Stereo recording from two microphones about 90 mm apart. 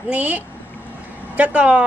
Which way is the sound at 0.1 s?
15° right (ahead or behind).